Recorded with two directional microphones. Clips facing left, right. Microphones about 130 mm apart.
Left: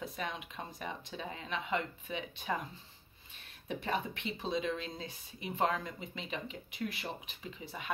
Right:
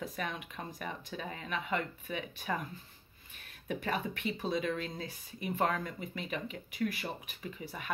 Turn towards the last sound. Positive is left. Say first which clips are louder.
# right 1 dB
turn(degrees=25)  # may be behind; listen again after turning